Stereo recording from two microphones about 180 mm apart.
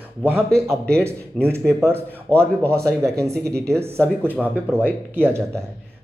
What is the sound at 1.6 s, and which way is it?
Speech, 5° left (ahead or behind).